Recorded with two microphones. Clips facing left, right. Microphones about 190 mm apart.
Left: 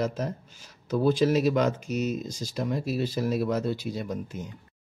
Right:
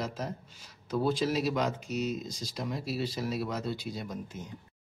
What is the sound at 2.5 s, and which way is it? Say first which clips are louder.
Speech: left 6 dB; 50° left (ahead or behind).